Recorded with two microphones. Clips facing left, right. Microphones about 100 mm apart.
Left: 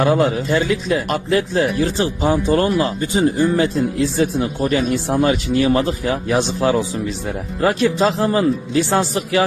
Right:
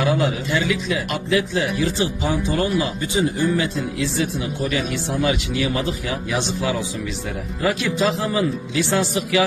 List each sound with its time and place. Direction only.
0.0 s speech: 35° left (ahead or behind)